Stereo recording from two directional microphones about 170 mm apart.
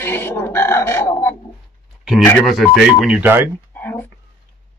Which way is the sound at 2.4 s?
Centre (ahead or behind).